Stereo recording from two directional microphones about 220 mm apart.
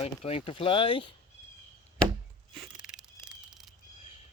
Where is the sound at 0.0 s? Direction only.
25° left (ahead or behind).